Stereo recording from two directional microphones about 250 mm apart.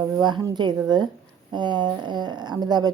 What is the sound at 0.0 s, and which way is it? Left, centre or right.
A woman's voice, centre.